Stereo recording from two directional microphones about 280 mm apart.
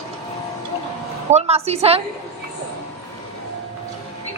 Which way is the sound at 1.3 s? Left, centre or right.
Right.